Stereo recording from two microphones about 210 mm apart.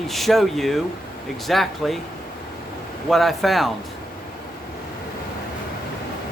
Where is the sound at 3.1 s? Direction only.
Centre (ahead or behind).